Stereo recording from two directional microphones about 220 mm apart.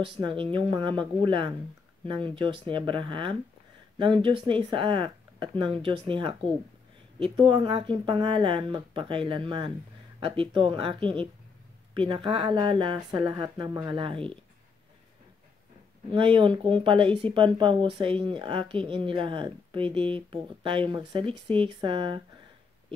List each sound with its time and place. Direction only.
0.2 s speech: 20° right (ahead or behind)
4.5 s speech: 20° right (ahead or behind)
7.3 s speech: 20° right (ahead or behind)
16.1 s speech: 20° right (ahead or behind)